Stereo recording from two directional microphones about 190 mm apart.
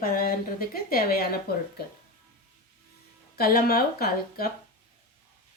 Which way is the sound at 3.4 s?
55° left (ahead or behind).